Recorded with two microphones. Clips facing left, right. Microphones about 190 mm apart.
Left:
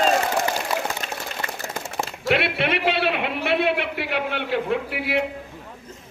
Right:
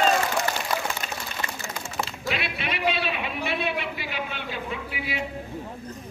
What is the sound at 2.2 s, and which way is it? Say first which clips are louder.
A man's voice: left 11 dB; 65° left (ahead or behind).